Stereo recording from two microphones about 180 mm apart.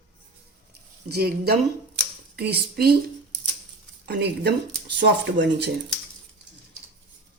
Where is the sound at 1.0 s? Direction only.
60° right (ahead or behind).